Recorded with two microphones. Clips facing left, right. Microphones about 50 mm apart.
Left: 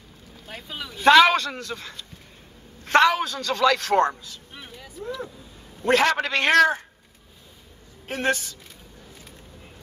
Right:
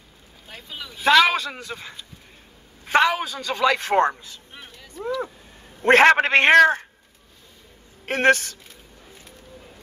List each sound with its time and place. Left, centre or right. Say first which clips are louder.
0.5 s a man's voice: left 2 dB; centre; by 4.4 s right
4.6 s a sound: left 3 dB; centre
5.8 s a man's voice: right 6 dB; right
8.0 s speech: right 7 dB; right